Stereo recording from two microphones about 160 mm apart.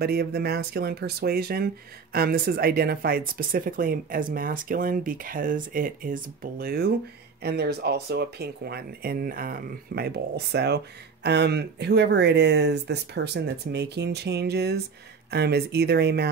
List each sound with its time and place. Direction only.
0.0 s speech: 80° right
7.4 s speech: 90° right